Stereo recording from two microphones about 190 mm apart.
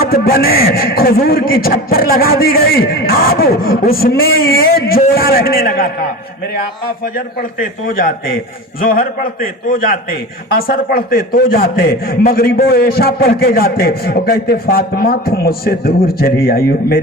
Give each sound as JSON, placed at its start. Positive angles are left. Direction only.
{"t": 0.0, "sound": "a man's voice", "side_deg": 50}
{"t": 7.2, "sound": "a man's voice", "side_deg": 45}